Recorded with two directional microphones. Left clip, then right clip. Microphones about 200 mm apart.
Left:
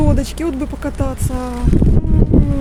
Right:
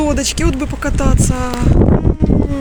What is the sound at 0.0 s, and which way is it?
Speech, 5° left (ahead or behind).